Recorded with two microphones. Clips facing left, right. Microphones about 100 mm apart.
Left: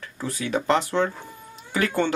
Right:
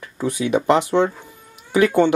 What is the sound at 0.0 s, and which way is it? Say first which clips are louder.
Speech: right 7 dB; 15° right (ahead or behind).